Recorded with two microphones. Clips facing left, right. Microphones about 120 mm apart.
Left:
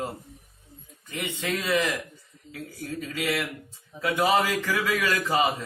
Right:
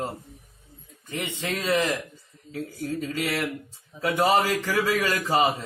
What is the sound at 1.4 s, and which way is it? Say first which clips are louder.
A man's voice: right 1 dB; 30° right (ahead or behind).